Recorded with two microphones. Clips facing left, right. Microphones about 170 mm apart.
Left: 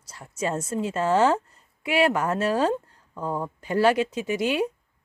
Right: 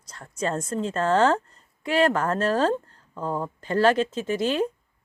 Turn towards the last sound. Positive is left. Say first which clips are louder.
# even
turn(degrees=10)  # may be behind; listen again after turning